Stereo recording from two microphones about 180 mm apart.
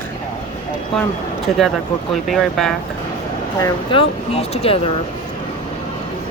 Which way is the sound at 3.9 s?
35° left (ahead or behind).